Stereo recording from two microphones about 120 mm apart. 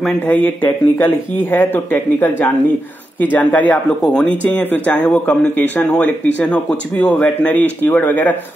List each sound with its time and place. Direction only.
0.3 s speech: 15° left (ahead or behind)